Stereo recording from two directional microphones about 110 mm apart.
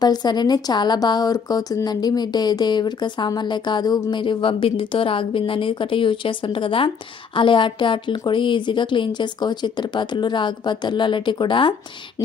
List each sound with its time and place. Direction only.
0.0 s speech: 40° left (ahead or behind)